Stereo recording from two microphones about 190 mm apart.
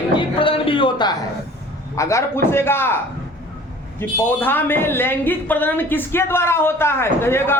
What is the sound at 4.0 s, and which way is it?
Speech, 10° left (ahead or behind).